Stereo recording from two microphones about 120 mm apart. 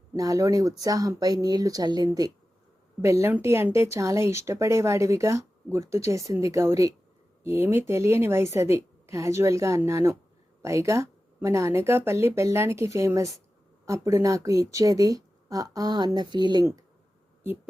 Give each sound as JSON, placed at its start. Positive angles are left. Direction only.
{"t": 0.1, "sound": "speech", "side_deg": -25}